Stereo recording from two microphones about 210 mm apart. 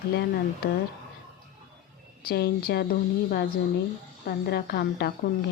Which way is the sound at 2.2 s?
50° left (ahead or behind).